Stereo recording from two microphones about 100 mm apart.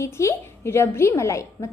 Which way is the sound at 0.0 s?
25° left (ahead or behind).